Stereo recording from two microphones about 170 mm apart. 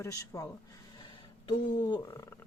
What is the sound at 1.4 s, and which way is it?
Speech, 25° left (ahead or behind).